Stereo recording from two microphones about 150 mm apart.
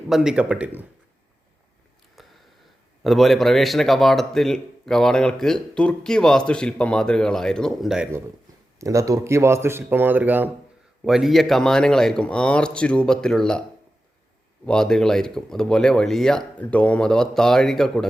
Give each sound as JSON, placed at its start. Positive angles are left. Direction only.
{"t": 0.1, "sound": "speech", "side_deg": -5}
{"t": 2.2, "sound": "a sound", "side_deg": 0}
{"t": 3.0, "sound": "speech", "side_deg": 0}
{"t": 8.8, "sound": "speech", "side_deg": -20}
{"t": 11.0, "sound": "speech", "side_deg": 0}
{"t": 14.6, "sound": "speech", "side_deg": 5}